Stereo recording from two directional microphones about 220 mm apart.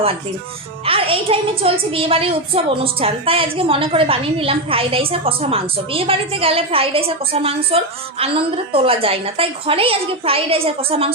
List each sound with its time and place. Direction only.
0.9 s a woman's voice: 25° right (ahead or behind)